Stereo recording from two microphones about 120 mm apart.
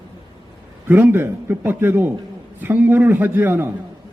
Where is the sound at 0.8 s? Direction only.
15° right (ahead or behind).